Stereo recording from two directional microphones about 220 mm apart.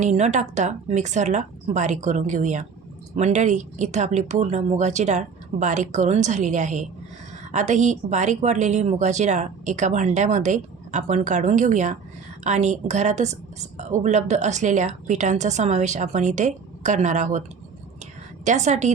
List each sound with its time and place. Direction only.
0.0 s a woman's voice: 30° right (ahead or behind)
18.4 s a woman's voice: 30° right (ahead or behind)